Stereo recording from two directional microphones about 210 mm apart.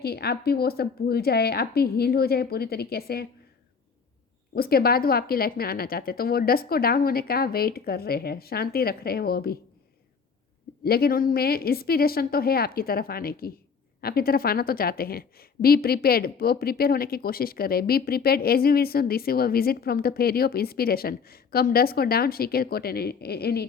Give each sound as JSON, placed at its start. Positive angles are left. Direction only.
{"t": 0.0, "sound": "a woman's voice", "side_deg": 50}
{"t": 4.5, "sound": "a woman's voice", "side_deg": 45}
{"t": 10.8, "sound": "a woman's voice", "side_deg": 45}